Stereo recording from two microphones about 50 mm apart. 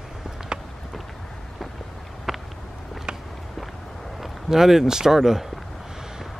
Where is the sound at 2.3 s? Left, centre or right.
Centre.